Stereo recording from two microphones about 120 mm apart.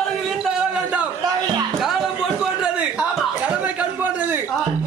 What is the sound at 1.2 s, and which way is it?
Speech, 40° right (ahead or behind).